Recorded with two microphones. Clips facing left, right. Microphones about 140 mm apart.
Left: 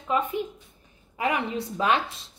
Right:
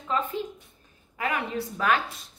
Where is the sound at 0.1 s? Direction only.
15° left (ahead or behind).